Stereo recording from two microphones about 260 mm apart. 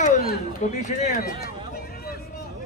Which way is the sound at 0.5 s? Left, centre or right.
Left.